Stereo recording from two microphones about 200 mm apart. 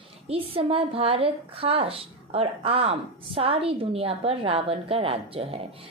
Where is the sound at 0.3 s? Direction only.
30° right (ahead or behind).